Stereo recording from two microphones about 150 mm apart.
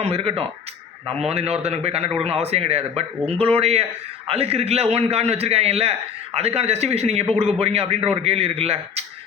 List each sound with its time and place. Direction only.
0.0 s a man's voice: 40° right (ahead or behind)